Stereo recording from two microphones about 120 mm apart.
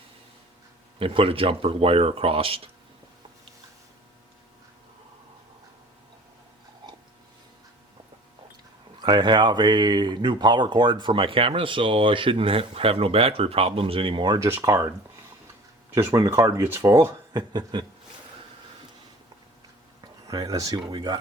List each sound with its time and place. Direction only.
0.9 s speech: 50° right (ahead or behind)
9.0 s speech: 35° right (ahead or behind)
14.3 s speech: 25° right (ahead or behind)
16.0 s speech: 25° right (ahead or behind)
17.3 s speech: 35° right (ahead or behind)
20.2 s speech: 30° right (ahead or behind)